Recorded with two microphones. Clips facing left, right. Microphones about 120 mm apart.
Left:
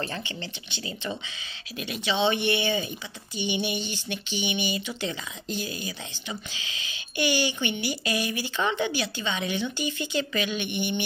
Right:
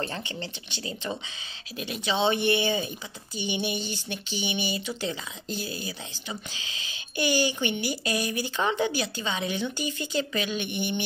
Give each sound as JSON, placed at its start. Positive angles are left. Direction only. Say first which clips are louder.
{"t": 0.2, "sound": "speech", "louder": "right 1 dB", "side_deg": -45}